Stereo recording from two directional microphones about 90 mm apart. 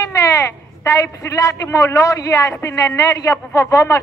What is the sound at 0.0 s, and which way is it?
A woman's voice, 40° left (ahead or behind).